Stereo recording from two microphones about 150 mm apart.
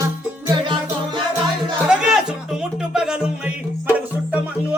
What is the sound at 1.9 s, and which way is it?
Music, 5° right (ahead or behind).